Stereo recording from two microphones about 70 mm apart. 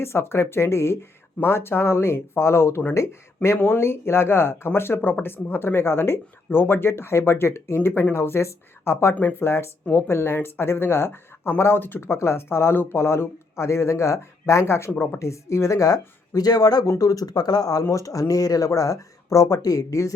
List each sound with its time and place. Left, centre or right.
0.0 s speech: left